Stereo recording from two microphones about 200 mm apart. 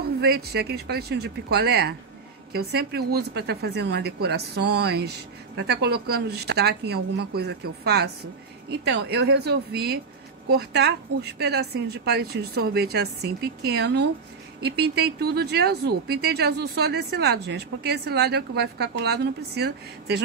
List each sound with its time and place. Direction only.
0.0 s speech: 50° right (ahead or behind)